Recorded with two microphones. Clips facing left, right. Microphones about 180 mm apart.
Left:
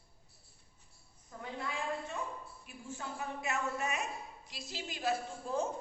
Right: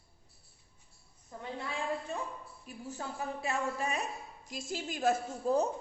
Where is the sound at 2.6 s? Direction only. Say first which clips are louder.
Right 5 dB; 40° right (ahead or behind).